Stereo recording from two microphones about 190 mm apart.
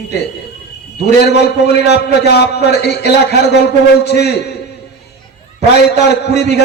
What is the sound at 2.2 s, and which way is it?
A man's voice, 60° left (ahead or behind).